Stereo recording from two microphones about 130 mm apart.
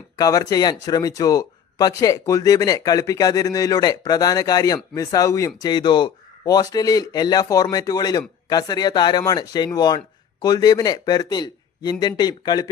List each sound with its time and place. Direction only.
0.2 s speech: 30° left (ahead or behind)